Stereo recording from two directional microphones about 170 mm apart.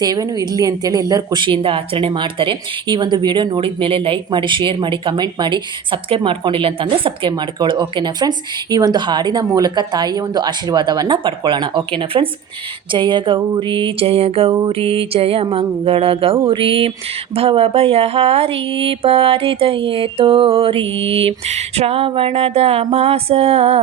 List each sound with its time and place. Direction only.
0.0 s speech: 20° right (ahead or behind)
14.7 s mantra: 35° right (ahead or behind)